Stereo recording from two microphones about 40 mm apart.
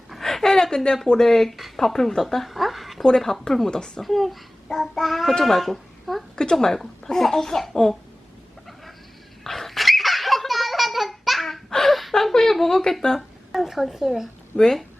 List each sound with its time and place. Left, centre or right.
0.2 s a sound: centre
1.0 s a child's voice: centre
3.7 s speech: centre
4.0 s a child's voice: centre
6.3 s speech: centre
6.7 s a child's voice: centre
9.4 s dog: centre
11.9 s gasp: centre
12.1 s speech: centre
13.5 s a child's voice: centre
14.5 s speech: centre